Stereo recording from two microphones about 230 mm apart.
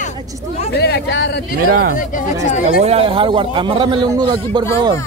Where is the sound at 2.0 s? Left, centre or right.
Left.